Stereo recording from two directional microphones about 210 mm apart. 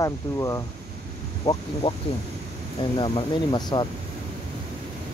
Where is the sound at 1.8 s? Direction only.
25° left (ahead or behind).